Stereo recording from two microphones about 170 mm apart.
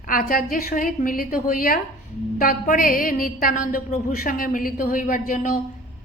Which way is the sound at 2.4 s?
50° left (ahead or behind).